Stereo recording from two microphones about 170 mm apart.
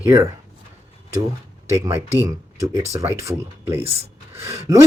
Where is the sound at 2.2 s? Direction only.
20° right (ahead or behind).